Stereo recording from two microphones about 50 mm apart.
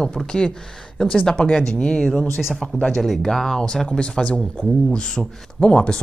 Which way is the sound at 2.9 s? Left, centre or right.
Centre.